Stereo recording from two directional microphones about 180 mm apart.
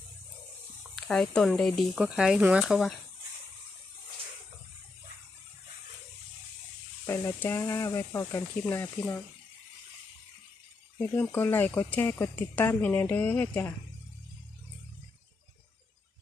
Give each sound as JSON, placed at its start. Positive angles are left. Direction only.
{"t": 0.9, "sound": "speech", "side_deg": 5}
{"t": 7.1, "sound": "speech", "side_deg": 15}
{"t": 10.9, "sound": "speech", "side_deg": 10}